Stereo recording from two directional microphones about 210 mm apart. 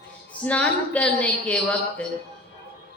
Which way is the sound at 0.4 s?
5° left (ahead or behind).